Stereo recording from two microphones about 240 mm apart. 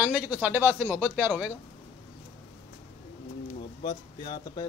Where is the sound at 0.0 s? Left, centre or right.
Centre.